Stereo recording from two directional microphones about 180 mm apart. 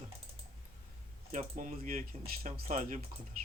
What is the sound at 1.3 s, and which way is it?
Speech, 45° right (ahead or behind).